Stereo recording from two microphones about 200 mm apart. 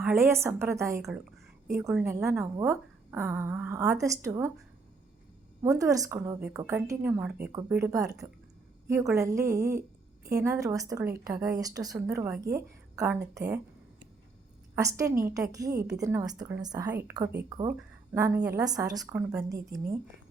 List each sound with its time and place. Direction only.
0.0 s a woman's voice: 10° right (ahead or behind)
5.6 s a woman's voice: 15° right (ahead or behind)
14.8 s a woman's voice: 15° right (ahead or behind)